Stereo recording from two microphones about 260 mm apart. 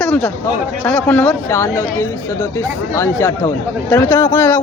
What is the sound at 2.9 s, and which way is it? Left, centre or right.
Speech, centre.